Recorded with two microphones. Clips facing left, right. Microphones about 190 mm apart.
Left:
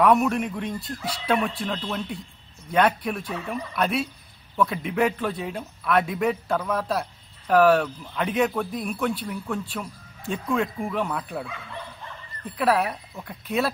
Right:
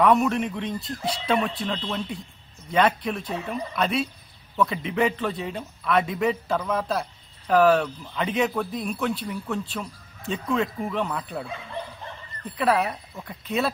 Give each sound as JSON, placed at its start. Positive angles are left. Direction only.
{"t": 0.0, "sound": "speech", "side_deg": 5}
{"t": 0.7, "sound": "speech", "side_deg": -25}
{"t": 1.2, "sound": "a man's voice", "side_deg": 5}
{"t": 12.5, "sound": "speech", "side_deg": 0}